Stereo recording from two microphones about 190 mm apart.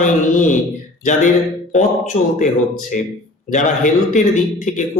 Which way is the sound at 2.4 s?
40° left (ahead or behind).